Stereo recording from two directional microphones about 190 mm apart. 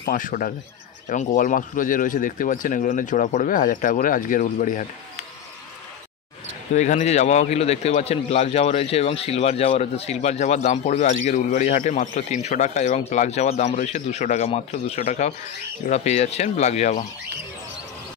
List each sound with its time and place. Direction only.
0.0 s speech: 45° left (ahead or behind)
6.7 s a man's voice: 40° left (ahead or behind)